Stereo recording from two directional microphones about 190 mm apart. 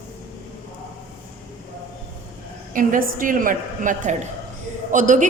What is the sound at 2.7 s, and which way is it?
A woman's voice, 45° right (ahead or behind).